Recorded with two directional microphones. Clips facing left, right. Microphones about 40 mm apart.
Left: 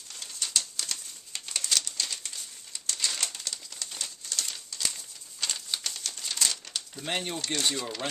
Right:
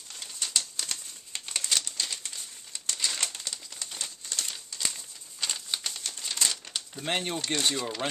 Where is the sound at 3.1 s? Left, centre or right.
Centre.